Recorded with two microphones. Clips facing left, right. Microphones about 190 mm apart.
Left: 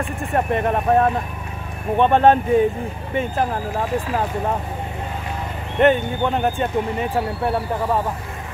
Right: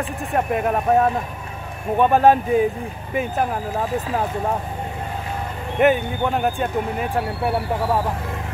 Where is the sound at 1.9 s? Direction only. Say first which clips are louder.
Even; 5° right (ahead or behind).